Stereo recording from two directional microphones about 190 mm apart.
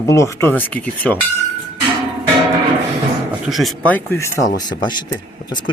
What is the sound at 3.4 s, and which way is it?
Speech, centre (ahead or behind).